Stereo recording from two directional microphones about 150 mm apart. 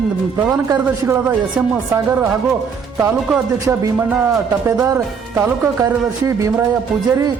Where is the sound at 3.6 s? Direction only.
20° right (ahead or behind).